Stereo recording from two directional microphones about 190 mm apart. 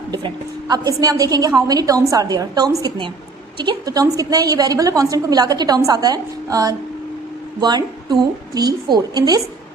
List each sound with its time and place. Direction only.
0.7 s a woman's voice: 20° right (ahead or behind)